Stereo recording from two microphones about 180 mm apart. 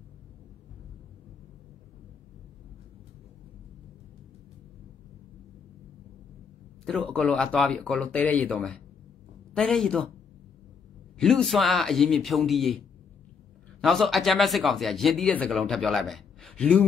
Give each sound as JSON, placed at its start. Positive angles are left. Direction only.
{"t": 6.9, "sound": "speech", "side_deg": 0}
{"t": 11.1, "sound": "speech", "side_deg": 0}